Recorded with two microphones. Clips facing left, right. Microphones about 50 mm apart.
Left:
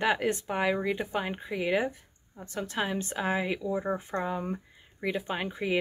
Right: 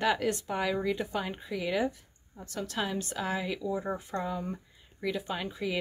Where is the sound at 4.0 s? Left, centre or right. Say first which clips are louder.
Left 2 dB; left.